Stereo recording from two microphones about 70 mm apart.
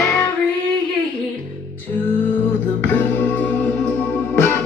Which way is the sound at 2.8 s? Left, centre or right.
Left.